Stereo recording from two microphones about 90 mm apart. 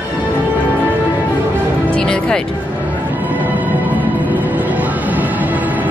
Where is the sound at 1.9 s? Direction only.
10° left (ahead or behind).